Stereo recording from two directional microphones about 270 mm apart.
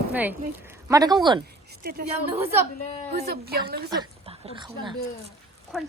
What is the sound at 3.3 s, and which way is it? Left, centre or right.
Speech, right.